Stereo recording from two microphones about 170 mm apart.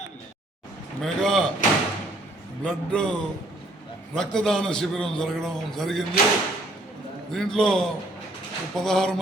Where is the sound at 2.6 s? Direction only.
5° left (ahead or behind).